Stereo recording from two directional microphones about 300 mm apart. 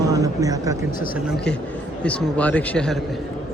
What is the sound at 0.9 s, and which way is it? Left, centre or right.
Speech, left.